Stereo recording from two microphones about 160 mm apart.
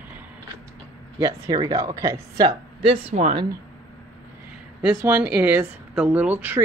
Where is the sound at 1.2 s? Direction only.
25° right (ahead or behind).